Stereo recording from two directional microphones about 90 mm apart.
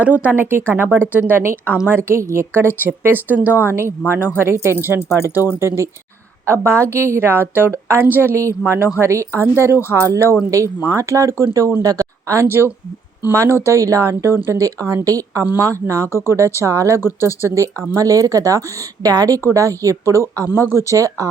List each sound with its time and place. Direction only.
0.2 s a woman's voice: 20° right (ahead or behind)
4.9 s speech: 30° left (ahead or behind)
5.5 s a woman's voice: 30° right (ahead or behind)